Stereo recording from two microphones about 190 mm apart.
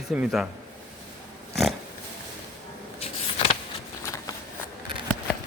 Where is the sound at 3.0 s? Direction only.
30° left (ahead or behind).